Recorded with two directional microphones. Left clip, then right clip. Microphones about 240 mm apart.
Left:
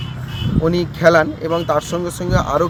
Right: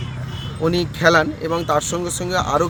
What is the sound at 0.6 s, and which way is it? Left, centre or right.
Speech, centre.